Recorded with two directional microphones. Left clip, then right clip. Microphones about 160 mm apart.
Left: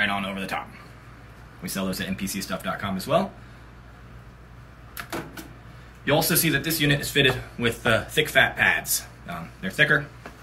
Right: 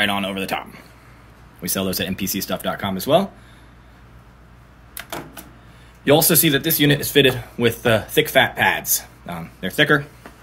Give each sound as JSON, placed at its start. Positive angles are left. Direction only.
{"t": 0.0, "sound": "a sound", "side_deg": -90}
{"t": 1.6, "sound": "speech", "side_deg": -90}
{"t": 6.0, "sound": "speech", "side_deg": -90}